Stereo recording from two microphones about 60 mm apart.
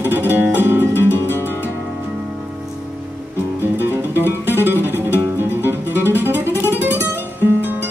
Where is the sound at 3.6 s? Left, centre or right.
Right.